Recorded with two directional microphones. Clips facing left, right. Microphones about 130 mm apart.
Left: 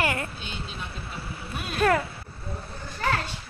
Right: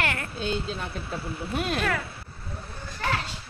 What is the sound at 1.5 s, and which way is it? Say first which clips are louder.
Speech: right 8 dB; 90° right.